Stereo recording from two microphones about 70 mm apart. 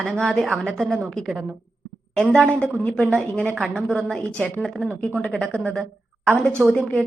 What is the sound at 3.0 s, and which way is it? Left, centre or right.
A woman's voice, centre.